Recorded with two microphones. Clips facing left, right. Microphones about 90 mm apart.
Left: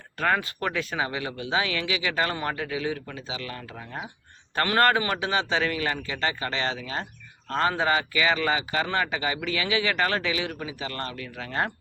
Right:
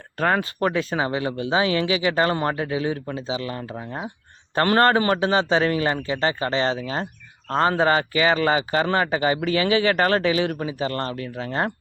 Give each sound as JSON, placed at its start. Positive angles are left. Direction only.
{"t": 0.2, "sound": "a man's voice", "side_deg": -35}